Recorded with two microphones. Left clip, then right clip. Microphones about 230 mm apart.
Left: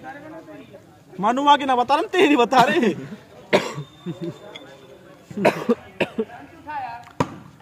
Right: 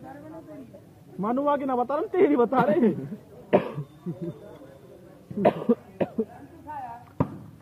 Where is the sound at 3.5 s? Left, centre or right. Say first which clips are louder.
Left 3 dB; left.